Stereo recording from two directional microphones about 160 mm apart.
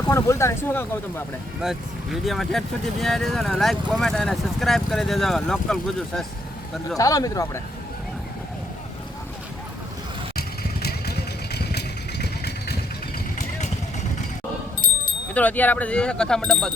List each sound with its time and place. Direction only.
0.1 s speech: 15° left (ahead or behind)
1.6 s speech: 5° right (ahead or behind)
6.9 s speech: 20° left (ahead or behind)
10.8 s vehicle: 90° left
15.4 s speech: 10° left (ahead or behind)